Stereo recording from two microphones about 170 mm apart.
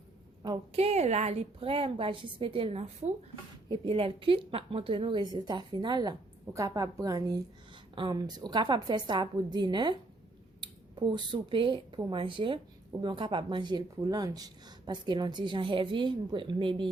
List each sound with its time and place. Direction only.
0.4 s speech: 25° right (ahead or behind)
0.8 s a woman's voice: 40° right (ahead or behind)